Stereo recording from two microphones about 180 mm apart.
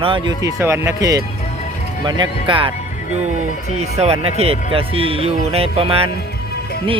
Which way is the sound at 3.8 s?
40° right (ahead or behind).